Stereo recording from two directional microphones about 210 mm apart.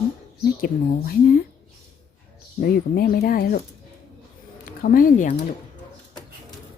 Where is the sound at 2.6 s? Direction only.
45° left (ahead or behind).